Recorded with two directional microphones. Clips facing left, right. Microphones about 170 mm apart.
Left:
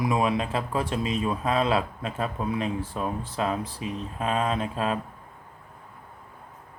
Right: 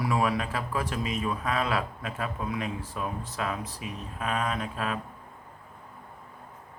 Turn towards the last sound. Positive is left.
turn(degrees=30)  # may be behind; listen again after turning